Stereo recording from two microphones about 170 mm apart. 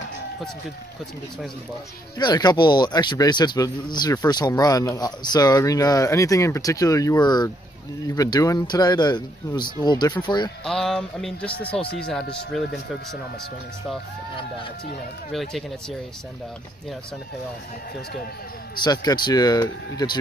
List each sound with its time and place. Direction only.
2.1 s a man's voice: 25° left (ahead or behind)
10.6 s speech: 5° left (ahead or behind)
15.3 s speech: centre (ahead or behind)
18.8 s a man's voice: 25° left (ahead or behind)